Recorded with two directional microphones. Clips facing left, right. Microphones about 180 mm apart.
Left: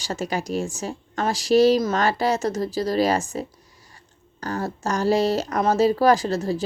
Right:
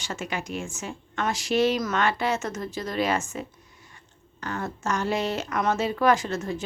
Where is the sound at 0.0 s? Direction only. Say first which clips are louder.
Left 5 dB; 35° left (ahead or behind).